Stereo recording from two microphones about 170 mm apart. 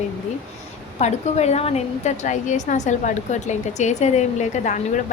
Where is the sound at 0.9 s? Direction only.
40° left (ahead or behind).